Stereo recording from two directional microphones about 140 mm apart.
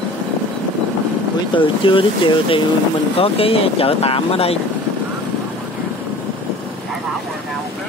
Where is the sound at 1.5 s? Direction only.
40° left (ahead or behind).